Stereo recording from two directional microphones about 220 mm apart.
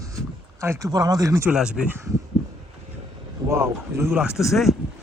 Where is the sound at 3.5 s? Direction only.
10° right (ahead or behind).